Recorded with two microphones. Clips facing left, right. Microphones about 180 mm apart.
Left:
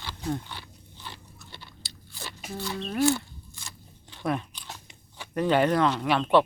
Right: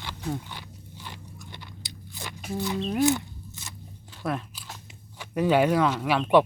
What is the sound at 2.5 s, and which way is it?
Speech, 15° right (ahead or behind).